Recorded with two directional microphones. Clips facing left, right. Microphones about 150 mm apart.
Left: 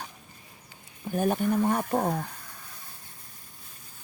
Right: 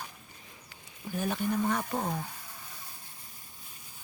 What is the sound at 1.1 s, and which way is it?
Speech, 50° left (ahead or behind).